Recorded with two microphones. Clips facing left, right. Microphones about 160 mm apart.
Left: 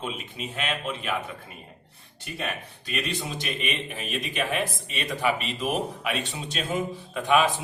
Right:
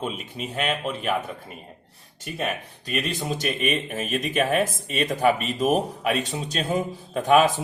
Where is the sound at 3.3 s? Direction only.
45° right (ahead or behind).